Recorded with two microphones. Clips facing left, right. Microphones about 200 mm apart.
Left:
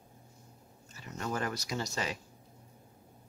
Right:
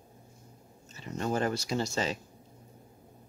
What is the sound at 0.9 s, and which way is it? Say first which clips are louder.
Speech: right 5 dB; 25° right (ahead or behind).